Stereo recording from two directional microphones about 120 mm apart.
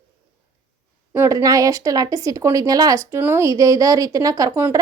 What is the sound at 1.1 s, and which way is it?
A woman's voice, 25° right (ahead or behind).